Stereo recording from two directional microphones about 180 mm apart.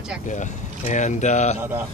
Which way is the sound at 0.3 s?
45° left (ahead or behind).